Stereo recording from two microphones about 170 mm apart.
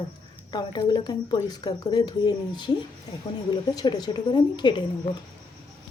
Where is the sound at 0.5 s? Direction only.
25° left (ahead or behind).